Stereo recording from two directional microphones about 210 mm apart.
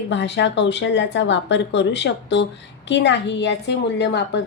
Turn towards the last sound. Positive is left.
turn(degrees=55)  # may be behind; listen again after turning